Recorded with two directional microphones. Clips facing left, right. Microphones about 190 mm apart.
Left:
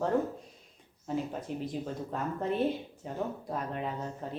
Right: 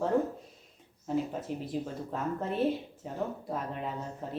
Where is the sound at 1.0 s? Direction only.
Centre (ahead or behind).